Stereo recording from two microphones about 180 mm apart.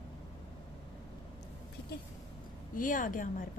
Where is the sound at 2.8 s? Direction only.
50° left (ahead or behind).